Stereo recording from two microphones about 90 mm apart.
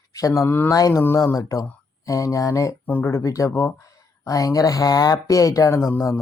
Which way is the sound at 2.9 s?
25° left (ahead or behind).